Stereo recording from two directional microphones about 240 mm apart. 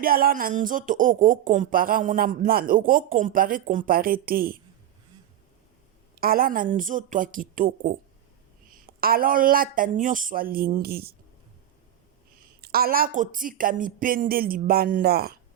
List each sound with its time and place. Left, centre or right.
0.0 s speech: right
6.1 s speech: right
12.6 s speech: right